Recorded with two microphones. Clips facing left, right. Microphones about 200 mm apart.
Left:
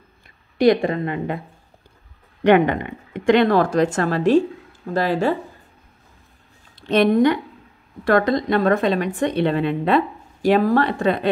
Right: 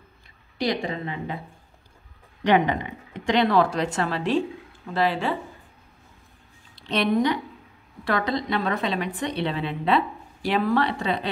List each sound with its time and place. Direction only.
0.6 s a woman's voice: 55° left (ahead or behind)
2.4 s a woman's voice: 55° left (ahead or behind)
6.7 s a woman's voice: 50° left (ahead or behind)